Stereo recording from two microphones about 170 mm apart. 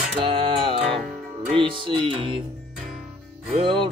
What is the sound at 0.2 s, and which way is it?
Music, 30° right (ahead or behind).